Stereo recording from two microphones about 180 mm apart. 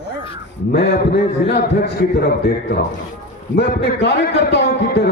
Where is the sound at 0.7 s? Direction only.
70° left (ahead or behind).